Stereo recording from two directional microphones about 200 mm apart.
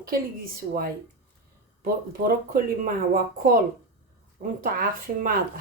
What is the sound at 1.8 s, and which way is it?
Speech, 45° right (ahead or behind).